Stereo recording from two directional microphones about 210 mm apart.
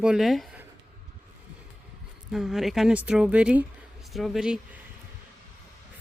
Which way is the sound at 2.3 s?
Centre (ahead or behind).